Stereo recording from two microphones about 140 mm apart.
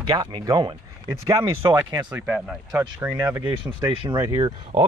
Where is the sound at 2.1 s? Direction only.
10° right (ahead or behind).